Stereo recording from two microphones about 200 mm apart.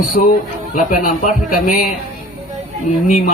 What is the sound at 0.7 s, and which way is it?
Speech, 40° left (ahead or behind).